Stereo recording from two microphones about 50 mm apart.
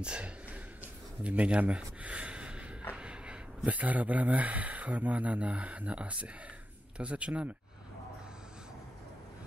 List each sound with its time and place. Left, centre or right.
0.0 s speech: right
2.0 s gasp: right
3.0 s speech: right